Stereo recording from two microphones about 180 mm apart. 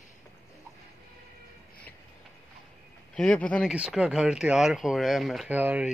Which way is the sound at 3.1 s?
5° left (ahead or behind).